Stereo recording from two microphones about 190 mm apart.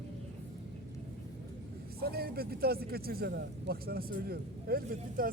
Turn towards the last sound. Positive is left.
turn(degrees=-50)  # may be behind; listen again after turning